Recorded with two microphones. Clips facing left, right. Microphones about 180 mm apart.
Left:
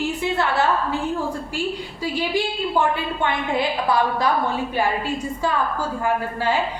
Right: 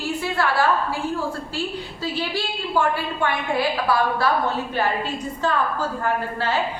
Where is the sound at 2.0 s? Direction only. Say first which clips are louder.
Left 4 dB; 15° left (ahead or behind).